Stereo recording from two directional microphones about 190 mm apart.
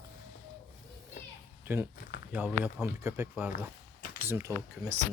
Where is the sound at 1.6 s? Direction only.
10° right (ahead or behind).